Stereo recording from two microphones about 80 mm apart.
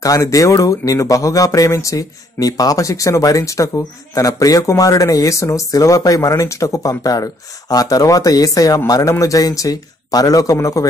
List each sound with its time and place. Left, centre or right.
0.0 s speech: left